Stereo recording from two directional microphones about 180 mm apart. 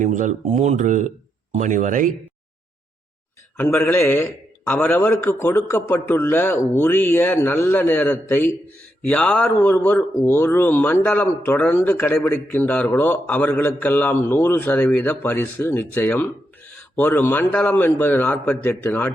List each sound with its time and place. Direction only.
0.0 s speech: 45° right (ahead or behind)
3.6 s speech: 10° left (ahead or behind)